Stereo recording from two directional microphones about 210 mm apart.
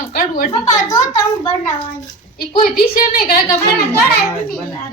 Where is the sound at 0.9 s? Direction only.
20° left (ahead or behind).